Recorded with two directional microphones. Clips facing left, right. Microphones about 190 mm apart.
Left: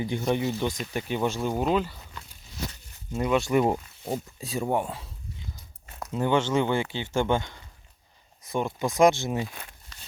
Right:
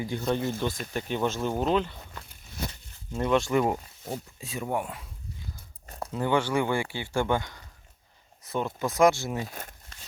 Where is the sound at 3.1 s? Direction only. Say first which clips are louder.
Left 1 dB; 10° left (ahead or behind).